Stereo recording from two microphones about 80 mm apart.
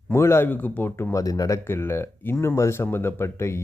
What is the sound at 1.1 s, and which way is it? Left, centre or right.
Speech, left.